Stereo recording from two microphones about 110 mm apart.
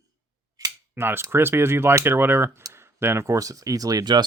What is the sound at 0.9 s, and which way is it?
Speech, 20° right (ahead or behind).